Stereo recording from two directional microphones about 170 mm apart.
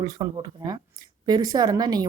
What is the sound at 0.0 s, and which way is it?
Speech, 20° right (ahead or behind).